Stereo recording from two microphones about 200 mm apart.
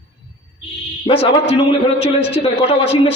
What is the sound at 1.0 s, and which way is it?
A man's voice, 30° left (ahead or behind).